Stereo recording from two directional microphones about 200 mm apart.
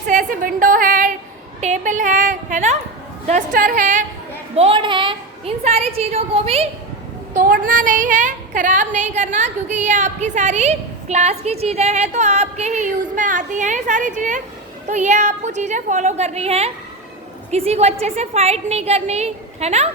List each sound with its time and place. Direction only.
0.1 s a sound: 40° right (ahead or behind)
3.2 s a woman's voice: 40° right (ahead or behind)
4.5 s a woman's voice: 30° right (ahead or behind)
7.3 s a woman's voice: 45° right (ahead or behind)